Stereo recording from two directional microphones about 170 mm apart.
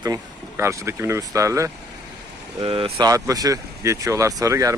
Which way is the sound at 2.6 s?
30° right (ahead or behind).